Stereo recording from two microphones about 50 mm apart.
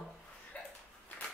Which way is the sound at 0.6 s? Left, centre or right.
Left.